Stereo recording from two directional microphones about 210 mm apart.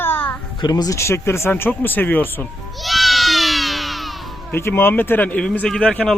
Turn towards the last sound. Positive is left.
turn(degrees=5)  # may be behind; listen again after turning